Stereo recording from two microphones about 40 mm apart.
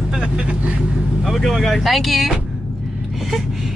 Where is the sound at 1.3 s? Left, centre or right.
Centre.